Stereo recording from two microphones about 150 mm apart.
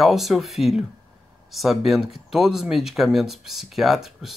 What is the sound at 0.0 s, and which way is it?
Speech, centre (ahead or behind).